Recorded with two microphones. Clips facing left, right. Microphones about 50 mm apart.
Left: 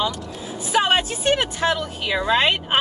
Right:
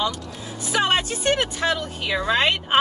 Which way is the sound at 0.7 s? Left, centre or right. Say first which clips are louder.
Left 2 dB; centre.